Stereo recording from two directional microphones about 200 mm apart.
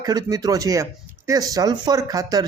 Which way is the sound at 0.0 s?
20° right (ahead or behind).